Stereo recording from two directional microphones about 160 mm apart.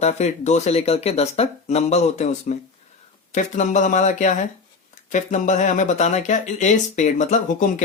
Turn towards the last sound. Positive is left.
turn(degrees=50)  # may be behind; listen again after turning